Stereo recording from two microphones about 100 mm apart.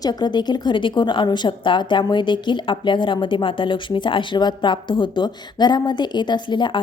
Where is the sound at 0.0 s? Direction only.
45° left (ahead or behind).